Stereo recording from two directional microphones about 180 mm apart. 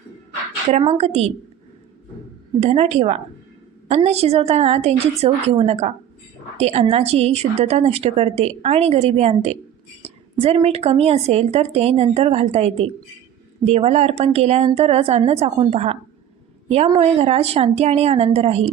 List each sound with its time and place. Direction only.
0.7 s a woman's voice: 35° right (ahead or behind)
2.6 s a woman's voice: 35° right (ahead or behind)